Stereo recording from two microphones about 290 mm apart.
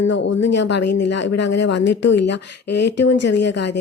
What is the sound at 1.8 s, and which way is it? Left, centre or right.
Speech, left.